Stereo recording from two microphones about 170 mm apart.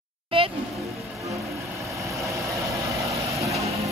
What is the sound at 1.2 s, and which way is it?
Vehicle, 20° right (ahead or behind).